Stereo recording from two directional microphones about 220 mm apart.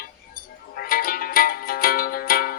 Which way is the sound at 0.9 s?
40° left (ahead or behind).